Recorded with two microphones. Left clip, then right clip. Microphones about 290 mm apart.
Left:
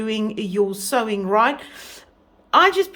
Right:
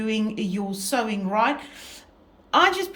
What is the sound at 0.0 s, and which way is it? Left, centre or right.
Speech, centre.